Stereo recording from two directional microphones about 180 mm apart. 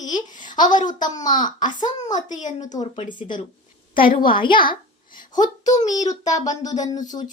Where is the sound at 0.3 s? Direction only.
45° left (ahead or behind).